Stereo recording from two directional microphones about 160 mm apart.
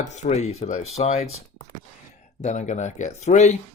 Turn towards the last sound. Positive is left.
turn(degrees=45)  # may be behind; listen again after turning